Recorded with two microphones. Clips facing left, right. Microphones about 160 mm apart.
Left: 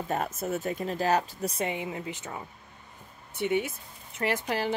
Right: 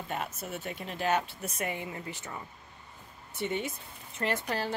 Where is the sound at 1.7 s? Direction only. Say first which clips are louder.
Left 4 dB; 15° left (ahead or behind).